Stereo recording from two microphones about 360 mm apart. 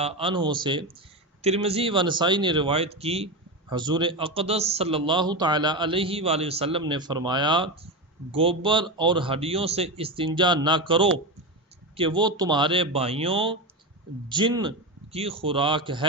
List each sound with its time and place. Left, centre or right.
0.0 s a man's voice: centre